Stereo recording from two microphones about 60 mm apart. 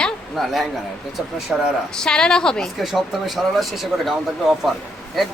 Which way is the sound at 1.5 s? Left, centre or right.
Right.